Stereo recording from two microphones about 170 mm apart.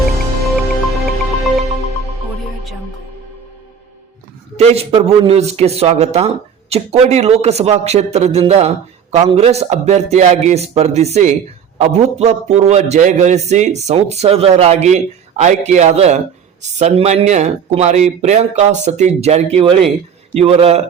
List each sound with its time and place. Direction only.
0.4 s music: centre (ahead or behind)
4.5 s a man's voice: 35° right (ahead or behind)